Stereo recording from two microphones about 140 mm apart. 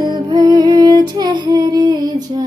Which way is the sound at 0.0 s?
30° right (ahead or behind).